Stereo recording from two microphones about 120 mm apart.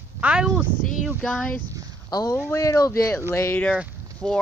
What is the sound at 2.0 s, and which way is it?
Speech, 30° left (ahead or behind).